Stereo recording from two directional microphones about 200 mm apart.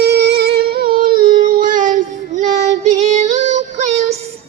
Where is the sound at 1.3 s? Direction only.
45° right (ahead or behind).